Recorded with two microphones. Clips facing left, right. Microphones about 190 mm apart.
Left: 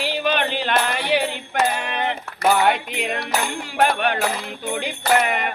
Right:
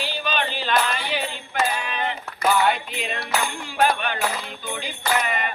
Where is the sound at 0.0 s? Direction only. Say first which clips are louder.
Left 5 dB; 70° left (ahead or behind).